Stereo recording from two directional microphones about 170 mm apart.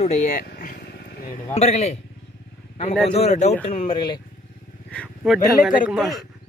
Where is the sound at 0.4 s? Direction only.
55° left (ahead or behind); by 4.2 s 35° left (ahead or behind).